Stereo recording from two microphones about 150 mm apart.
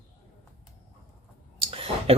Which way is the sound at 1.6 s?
40° right (ahead or behind).